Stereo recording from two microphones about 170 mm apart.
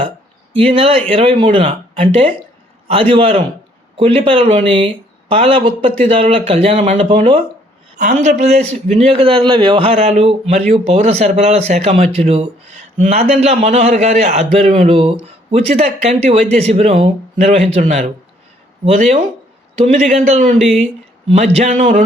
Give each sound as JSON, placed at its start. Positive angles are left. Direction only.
{"t": 0.5, "sound": "a man's voice", "side_deg": -30}
{"t": 7.9, "sound": "a man's voice", "side_deg": -50}